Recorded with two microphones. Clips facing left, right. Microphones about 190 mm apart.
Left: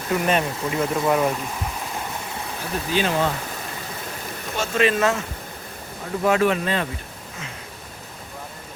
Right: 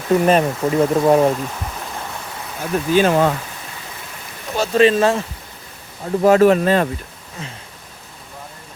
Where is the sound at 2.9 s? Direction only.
50° right (ahead or behind).